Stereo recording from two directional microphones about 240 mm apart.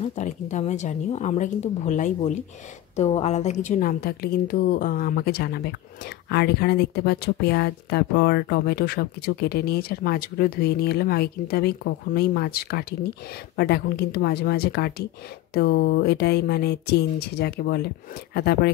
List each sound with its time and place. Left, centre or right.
0.0 s a woman's voice: left